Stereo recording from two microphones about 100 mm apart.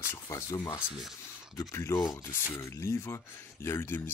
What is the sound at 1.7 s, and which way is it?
Speech, 30° left (ahead or behind).